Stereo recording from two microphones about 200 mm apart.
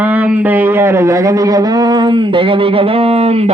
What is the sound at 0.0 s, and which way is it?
Speech, 10° right (ahead or behind).